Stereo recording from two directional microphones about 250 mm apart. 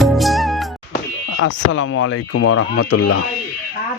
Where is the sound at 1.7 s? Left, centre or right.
Left.